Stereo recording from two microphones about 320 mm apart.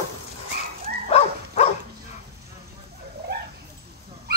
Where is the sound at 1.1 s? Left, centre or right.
Centre.